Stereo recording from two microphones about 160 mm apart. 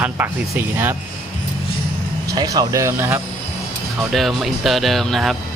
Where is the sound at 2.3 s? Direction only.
25° right (ahead or behind).